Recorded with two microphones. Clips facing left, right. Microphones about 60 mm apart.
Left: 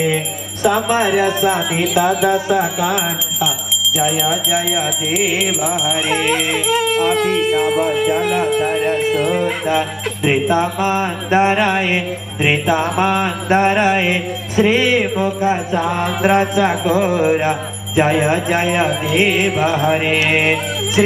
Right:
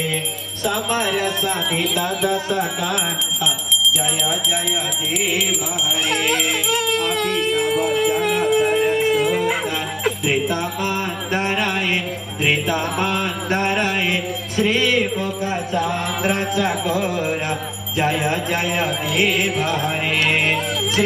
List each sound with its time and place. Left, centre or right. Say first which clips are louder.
0.0 s music: left 6 dB; centre
10.2 s music: left 10 dB; centre